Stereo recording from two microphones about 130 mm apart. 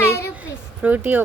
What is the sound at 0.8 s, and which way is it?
Speech, 15° right (ahead or behind).